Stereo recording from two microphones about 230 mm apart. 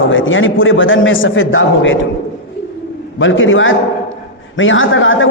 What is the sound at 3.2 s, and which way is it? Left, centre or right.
Speech, left.